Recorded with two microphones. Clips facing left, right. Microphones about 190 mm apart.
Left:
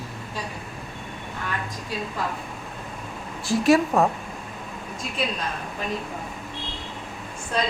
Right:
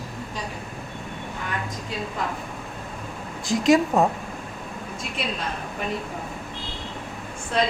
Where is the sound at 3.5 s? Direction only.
15° right (ahead or behind).